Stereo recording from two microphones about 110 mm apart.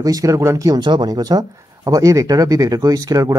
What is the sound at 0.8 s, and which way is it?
Speech, 40° right (ahead or behind).